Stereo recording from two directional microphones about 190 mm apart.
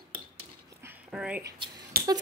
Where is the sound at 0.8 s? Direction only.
5° right (ahead or behind).